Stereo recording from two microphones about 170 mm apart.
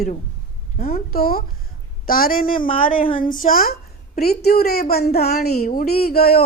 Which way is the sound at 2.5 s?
30° left (ahead or behind).